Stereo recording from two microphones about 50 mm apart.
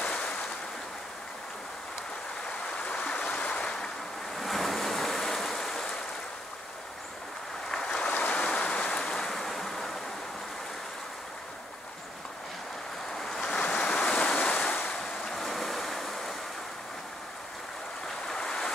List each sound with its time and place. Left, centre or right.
0.0 s waves: left
2.7 s a sound: left
4.4 s waves: centre
7.7 s boat: centre
8.2 s stream: left
8.5 s a sound: left
8.9 s waves: centre
13.4 s waves: centre
14.8 s waves: centre
18.0 s waves: centre